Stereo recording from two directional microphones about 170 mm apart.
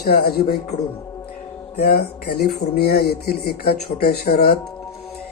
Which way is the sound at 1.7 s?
65° left (ahead or behind).